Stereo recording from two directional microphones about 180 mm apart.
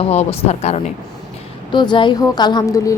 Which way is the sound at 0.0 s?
35° left (ahead or behind).